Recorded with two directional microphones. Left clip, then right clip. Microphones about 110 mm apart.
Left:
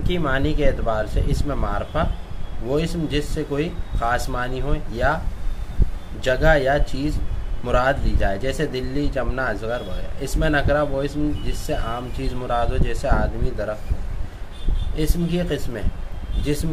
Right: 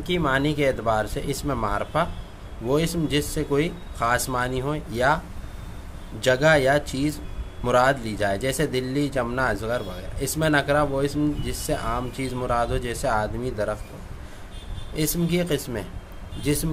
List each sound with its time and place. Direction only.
0.0 s speech: 40° right (ahead or behind)
6.2 s speech: 50° right (ahead or behind)
15.0 s speech: 65° right (ahead or behind); by 16.6 s 50° right (ahead or behind)